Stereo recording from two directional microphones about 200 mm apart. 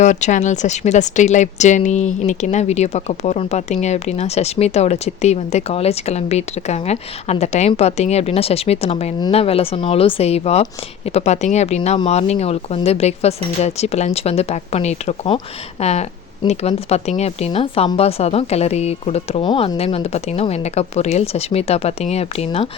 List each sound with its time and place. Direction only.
0.0 s a woman's voice: 35° left (ahead or behind)